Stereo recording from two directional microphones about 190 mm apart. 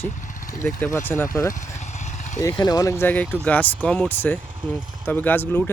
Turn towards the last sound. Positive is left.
turn(degrees=10)  # may be behind; listen again after turning